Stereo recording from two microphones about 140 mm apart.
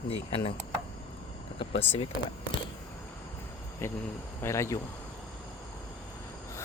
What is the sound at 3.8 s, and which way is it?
Cricket, 15° left (ahead or behind).